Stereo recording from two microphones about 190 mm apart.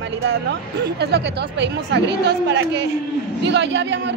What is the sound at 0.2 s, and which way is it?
A man's voice, 70° right (ahead or behind).